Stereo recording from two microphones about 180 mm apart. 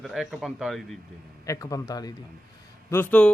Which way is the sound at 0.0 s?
Centre (ahead or behind).